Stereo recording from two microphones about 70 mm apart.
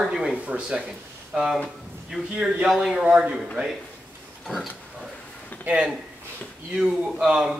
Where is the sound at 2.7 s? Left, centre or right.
Centre.